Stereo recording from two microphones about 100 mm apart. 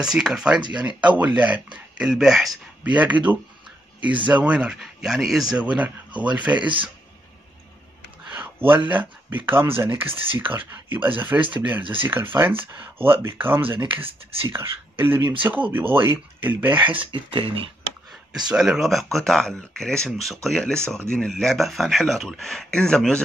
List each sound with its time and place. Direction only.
0.0 s speech: 5° right (ahead or behind)
2.8 s speech: 15° right (ahead or behind)
6.6 s speech: 55° right (ahead or behind)
8.3 s speech: 20° right (ahead or behind)
10.0 s speech: 60° right (ahead or behind)
11.1 s speech: 20° right (ahead or behind)
11.8 s speech: 60° right (ahead or behind)
12.1 s speech: 20° right (ahead or behind)
16.8 s speech: 60° right (ahead or behind)
18.5 s speech: 5° right (ahead or behind)